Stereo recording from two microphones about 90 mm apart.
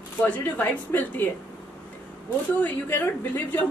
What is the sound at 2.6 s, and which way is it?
A woman's voice, 20° left (ahead or behind).